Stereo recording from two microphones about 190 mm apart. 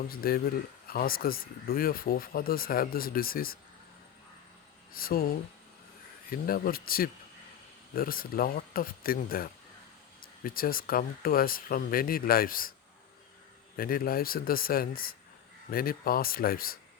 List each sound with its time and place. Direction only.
0.1 s speech: 50° left (ahead or behind)
4.9 s speech: 50° left (ahead or behind)
6.3 s speech: 50° left (ahead or behind)
13.7 s speech: 50° left (ahead or behind)